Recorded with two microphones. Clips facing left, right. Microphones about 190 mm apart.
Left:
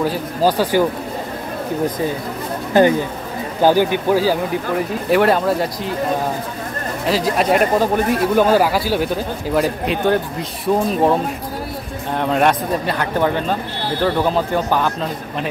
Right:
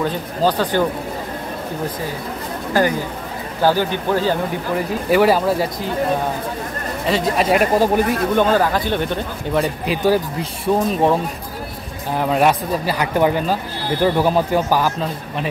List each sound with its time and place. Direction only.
0.0 s speech: 10° left (ahead or behind)
2.8 s speech: 20° left (ahead or behind); by 5.9 s centre (ahead or behind)
7.1 s speech: centre (ahead or behind)
8.4 s a man's voice: 10° left (ahead or behind)